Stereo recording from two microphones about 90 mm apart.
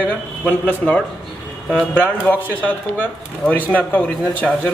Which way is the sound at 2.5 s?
15° left (ahead or behind).